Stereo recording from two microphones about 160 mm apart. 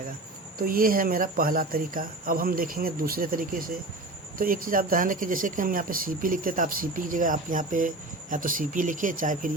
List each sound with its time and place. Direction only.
0.6 s speech: 60° right (ahead or behind)